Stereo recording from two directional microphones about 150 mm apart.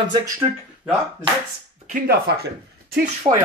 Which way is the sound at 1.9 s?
90° right.